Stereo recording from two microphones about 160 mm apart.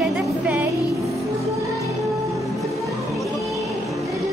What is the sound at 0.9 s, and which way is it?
Music, centre (ahead or behind).